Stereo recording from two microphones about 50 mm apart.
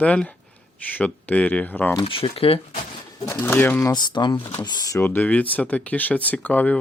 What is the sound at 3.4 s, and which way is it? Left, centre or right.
Speech, left.